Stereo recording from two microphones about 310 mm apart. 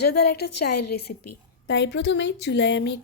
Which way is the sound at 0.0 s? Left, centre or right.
Left.